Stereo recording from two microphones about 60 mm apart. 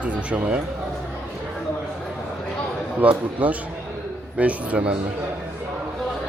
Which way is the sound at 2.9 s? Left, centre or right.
Right.